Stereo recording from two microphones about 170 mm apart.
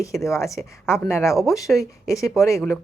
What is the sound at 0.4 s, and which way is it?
Speech, centre (ahead or behind).